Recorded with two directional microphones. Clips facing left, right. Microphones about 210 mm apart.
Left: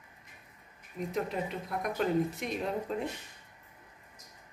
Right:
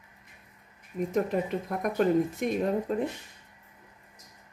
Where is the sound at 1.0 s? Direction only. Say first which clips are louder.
Right 6 dB; 50° right (ahead or behind).